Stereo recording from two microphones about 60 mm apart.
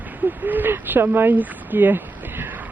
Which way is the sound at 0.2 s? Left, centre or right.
Right.